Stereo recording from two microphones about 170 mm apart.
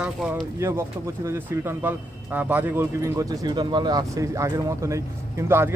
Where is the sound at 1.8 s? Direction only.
10° right (ahead or behind).